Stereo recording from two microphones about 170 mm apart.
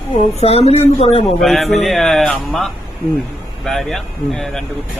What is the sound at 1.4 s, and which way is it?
Speech, centre (ahead or behind).